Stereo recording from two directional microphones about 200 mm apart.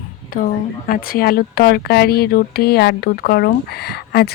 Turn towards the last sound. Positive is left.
turn(degrees=50)  # may be behind; listen again after turning